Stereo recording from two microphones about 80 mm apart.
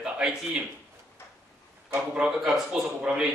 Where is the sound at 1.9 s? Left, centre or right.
Centre.